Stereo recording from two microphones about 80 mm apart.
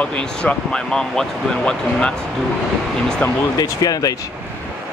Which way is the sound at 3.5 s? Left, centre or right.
Left.